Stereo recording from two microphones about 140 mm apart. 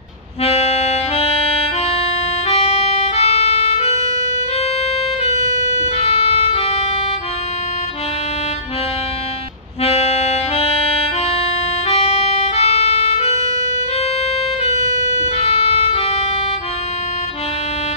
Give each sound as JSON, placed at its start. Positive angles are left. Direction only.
{"t": 0.4, "sound": "harmonica", "side_deg": 45}
{"t": 3.7, "sound": "music", "side_deg": 50}
{"t": 5.3, "sound": "music", "side_deg": 50}
{"t": 9.8, "sound": "music", "side_deg": 50}
{"t": 14.6, "sound": "music", "side_deg": 50}